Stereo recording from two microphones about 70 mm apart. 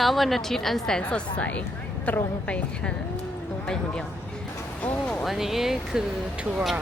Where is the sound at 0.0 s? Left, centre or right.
Centre.